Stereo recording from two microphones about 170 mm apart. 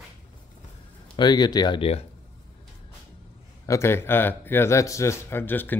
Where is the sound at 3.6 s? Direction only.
15° left (ahead or behind).